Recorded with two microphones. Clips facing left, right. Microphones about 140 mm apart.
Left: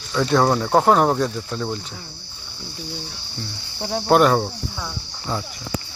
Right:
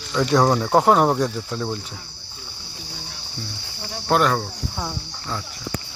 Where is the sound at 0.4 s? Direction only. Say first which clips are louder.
Even; centre (ahead or behind).